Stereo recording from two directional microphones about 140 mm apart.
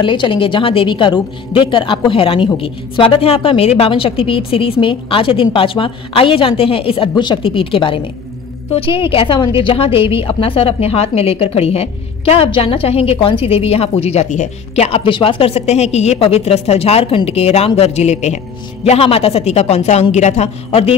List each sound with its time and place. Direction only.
0.0 s a woman's voice: 35° left (ahead or behind); by 14.9 s 55° left (ahead or behind)
14.9 s a woman's voice: 40° left (ahead or behind)